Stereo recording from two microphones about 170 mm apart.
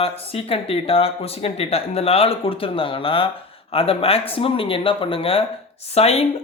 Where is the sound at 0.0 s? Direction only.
35° left (ahead or behind).